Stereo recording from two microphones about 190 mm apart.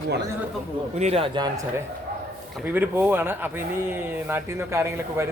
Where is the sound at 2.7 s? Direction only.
10° right (ahead or behind).